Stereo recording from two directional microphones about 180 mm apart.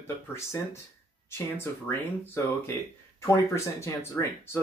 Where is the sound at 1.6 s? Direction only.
15° left (ahead or behind).